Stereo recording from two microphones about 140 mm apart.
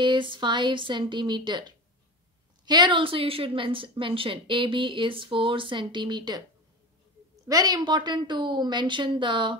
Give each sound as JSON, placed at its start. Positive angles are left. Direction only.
{"t": 0.0, "sound": "a woman's voice", "side_deg": -35}
{"t": 7.4, "sound": "a woman's voice", "side_deg": -25}